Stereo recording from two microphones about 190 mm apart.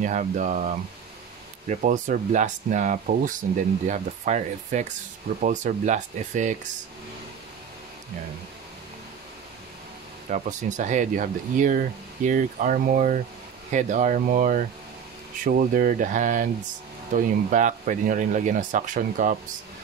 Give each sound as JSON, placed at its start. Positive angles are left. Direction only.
{"t": 0.0, "sound": "speech", "side_deg": -40}
{"t": 10.3, "sound": "speech", "side_deg": -40}